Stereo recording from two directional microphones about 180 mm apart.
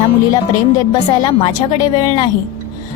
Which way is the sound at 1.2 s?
20° left (ahead or behind).